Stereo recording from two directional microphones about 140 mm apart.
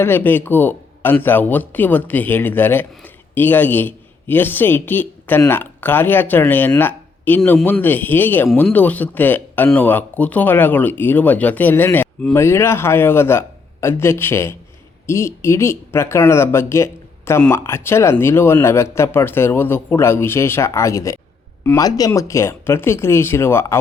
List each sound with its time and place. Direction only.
0.0 s a man's voice: 15° left (ahead or behind)